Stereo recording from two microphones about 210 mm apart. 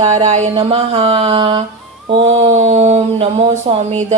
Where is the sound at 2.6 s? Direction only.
30° right (ahead or behind).